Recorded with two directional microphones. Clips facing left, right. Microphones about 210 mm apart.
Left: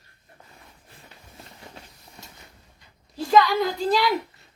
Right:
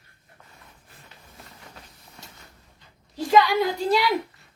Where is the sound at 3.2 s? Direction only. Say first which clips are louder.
Even; 15° right (ahead or behind).